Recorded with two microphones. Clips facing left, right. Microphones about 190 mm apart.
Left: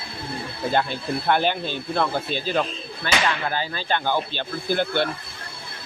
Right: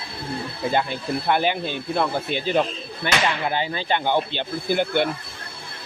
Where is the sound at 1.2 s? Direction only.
10° right (ahead or behind).